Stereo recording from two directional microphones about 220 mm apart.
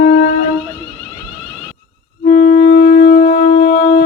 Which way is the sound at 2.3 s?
35° left (ahead or behind).